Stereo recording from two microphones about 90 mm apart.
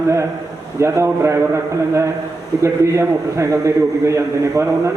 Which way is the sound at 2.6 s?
35° right (ahead or behind).